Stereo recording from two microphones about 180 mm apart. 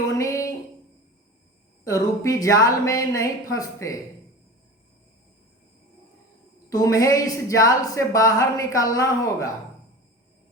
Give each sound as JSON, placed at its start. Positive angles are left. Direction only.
{"t": 0.2, "sound": "a sound", "side_deg": 15}
{"t": 1.8, "sound": "a woman's voice", "side_deg": 20}
{"t": 6.7, "sound": "a woman's voice", "side_deg": 20}